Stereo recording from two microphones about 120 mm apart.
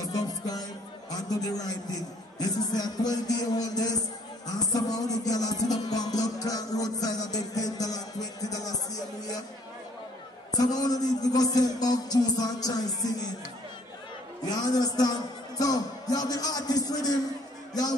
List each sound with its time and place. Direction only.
0.0 s music: 30° left (ahead or behind)
1.1 s a man's voice: 30° left (ahead or behind)
4.5 s music: 35° left (ahead or behind)
10.5 s a man's voice: 35° left (ahead or behind)
14.4 s a man's voice: 30° left (ahead or behind)